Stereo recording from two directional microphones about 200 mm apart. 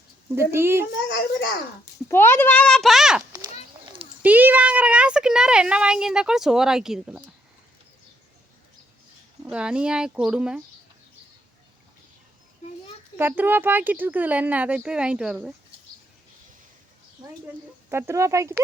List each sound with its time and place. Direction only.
0.3 s speech: 10° right (ahead or behind)
1.0 s a child's voice: 55° left (ahead or behind)
1.8 s a child's voice: 10° left (ahead or behind)
9.4 s speech: 5° right (ahead or behind)
13.1 s speech: 10° right (ahead or behind)
17.8 s speech: 15° right (ahead or behind)